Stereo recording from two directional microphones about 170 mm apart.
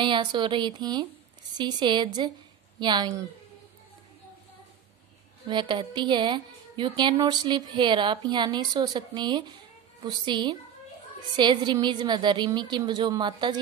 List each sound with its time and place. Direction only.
0.0 s a woman's voice: 25° right (ahead or behind)
5.5 s a woman's voice: 25° right (ahead or behind)